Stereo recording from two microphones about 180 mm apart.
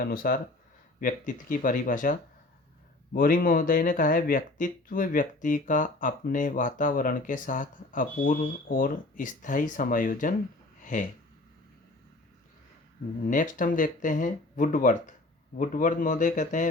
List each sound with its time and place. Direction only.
0.0 s speech: 55° left (ahead or behind)
13.2 s speech: 45° left (ahead or behind)